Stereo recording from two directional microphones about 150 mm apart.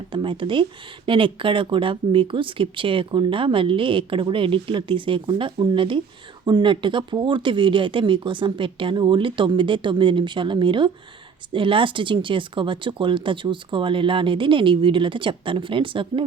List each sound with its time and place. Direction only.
0.1 s speech: 35° right (ahead or behind)